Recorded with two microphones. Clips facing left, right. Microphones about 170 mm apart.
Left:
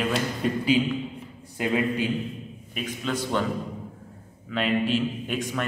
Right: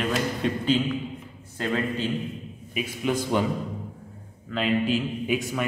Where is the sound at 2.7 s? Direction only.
10° right (ahead or behind).